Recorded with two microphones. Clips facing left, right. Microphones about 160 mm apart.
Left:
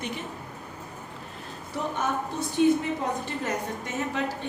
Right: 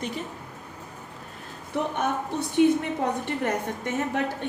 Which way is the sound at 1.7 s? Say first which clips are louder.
Right 4 dB; 60° right (ahead or behind).